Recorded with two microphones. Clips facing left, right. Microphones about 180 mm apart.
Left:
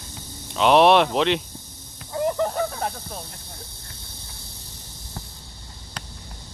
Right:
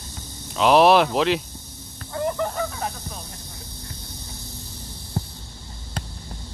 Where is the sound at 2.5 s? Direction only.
35° left (ahead or behind).